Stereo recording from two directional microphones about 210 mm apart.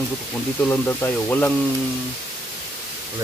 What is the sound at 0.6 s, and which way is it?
Speech, 10° left (ahead or behind).